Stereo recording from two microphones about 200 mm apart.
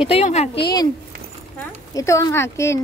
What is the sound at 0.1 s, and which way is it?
Speech, 35° left (ahead or behind).